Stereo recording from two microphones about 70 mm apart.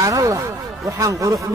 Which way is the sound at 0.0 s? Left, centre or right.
Right.